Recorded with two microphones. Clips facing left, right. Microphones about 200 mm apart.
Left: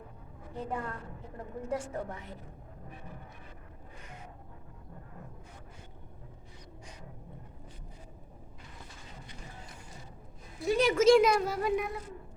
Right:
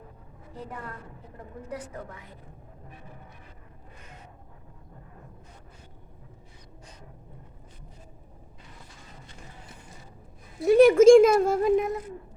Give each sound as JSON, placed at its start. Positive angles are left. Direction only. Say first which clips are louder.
{"t": 1.7, "sound": "a woman's voice", "louder": "left 3 dB", "side_deg": 25}
{"t": 10.7, "sound": "a sound", "louder": "right 11 dB", "side_deg": -55}
{"t": 11.0, "sound": "speech", "louder": "right 4 dB", "side_deg": -50}